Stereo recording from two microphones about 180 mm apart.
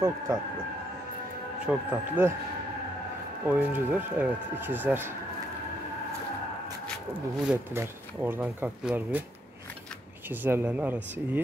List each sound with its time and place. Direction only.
0.3 s speech: 15° right (ahead or behind)
1.7 s speech: 10° right (ahead or behind)
3.4 s speech: 10° right (ahead or behind)
7.4 s speech: 15° right (ahead or behind)
10.3 s speech: 10° right (ahead or behind)